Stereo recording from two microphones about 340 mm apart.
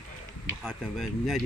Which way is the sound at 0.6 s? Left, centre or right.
Centre.